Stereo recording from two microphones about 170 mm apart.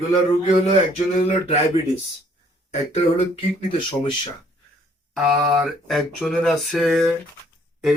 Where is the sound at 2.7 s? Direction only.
40° left (ahead or behind).